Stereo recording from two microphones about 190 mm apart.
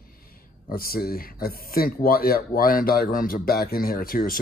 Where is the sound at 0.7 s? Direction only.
50° left (ahead or behind).